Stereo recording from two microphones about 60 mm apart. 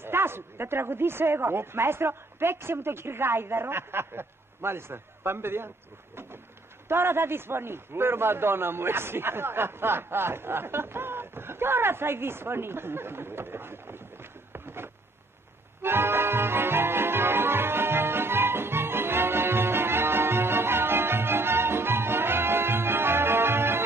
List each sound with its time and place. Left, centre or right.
0.0 s a man's voice: right
6.9 s a man's voice: right
14.5 s a sound: right
15.8 s music: right